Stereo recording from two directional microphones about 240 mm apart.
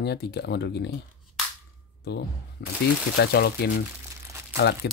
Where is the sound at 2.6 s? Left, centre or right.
Left.